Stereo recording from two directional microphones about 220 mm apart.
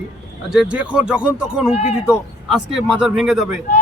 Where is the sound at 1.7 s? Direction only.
30° left (ahead or behind).